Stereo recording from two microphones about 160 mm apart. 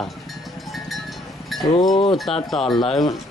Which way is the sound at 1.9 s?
30° left (ahead or behind).